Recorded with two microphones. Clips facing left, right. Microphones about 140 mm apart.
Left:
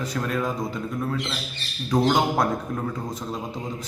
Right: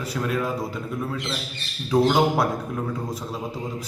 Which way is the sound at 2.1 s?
5° right (ahead or behind).